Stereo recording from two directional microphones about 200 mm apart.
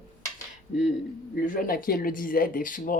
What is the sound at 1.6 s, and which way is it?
Speech, 45° left (ahead or behind).